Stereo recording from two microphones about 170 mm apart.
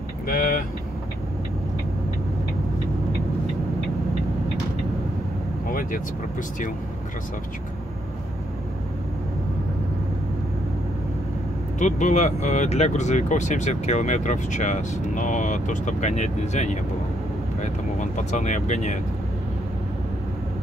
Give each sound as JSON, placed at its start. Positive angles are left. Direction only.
{"t": 0.3, "sound": "vehicle", "side_deg": 55}
{"t": 5.7, "sound": "vehicle", "side_deg": 55}
{"t": 11.8, "sound": "speech", "side_deg": 45}